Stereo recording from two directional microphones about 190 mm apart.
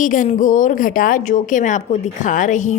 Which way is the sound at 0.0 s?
45° left (ahead or behind).